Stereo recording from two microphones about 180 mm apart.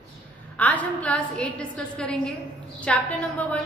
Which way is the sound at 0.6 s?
10° left (ahead or behind).